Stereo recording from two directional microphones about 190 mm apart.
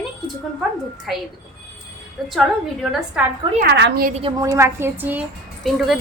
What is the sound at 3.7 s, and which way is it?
Speech, 60° right (ahead or behind).